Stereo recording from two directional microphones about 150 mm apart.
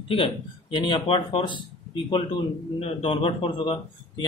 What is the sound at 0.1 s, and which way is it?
A man's voice, 35° left (ahead or behind).